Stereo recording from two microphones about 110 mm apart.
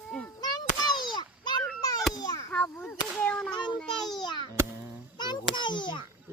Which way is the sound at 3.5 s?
40° left (ahead or behind).